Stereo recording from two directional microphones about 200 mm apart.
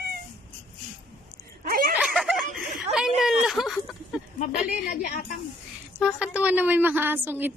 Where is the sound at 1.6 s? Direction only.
45° right (ahead or behind).